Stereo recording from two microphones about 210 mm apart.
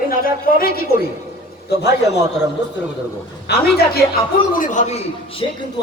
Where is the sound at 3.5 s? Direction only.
50° left (ahead or behind).